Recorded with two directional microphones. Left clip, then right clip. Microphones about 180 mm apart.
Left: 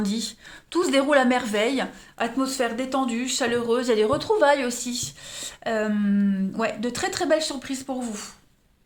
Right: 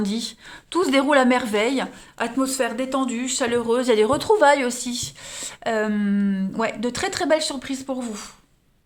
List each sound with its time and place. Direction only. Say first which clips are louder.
0.0 s speech: right 2 dB; 25° right (ahead or behind)